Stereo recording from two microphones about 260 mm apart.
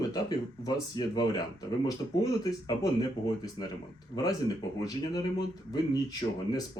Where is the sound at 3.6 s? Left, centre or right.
Centre.